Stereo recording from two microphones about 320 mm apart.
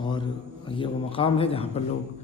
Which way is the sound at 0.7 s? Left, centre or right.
Centre.